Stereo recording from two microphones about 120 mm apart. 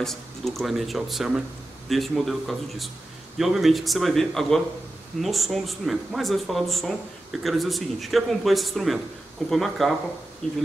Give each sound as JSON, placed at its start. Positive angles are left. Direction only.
{"t": 0.0, "sound": "speech", "side_deg": 0}